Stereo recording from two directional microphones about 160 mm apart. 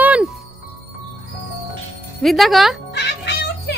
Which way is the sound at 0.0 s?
10° right (ahead or behind).